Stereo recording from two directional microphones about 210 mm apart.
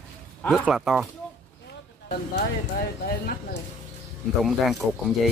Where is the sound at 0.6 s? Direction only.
5° right (ahead or behind).